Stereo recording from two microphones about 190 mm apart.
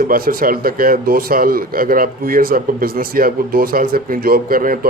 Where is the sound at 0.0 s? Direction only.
50° right (ahead or behind).